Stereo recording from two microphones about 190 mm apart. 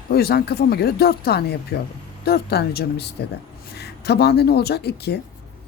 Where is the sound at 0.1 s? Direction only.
55° left (ahead or behind).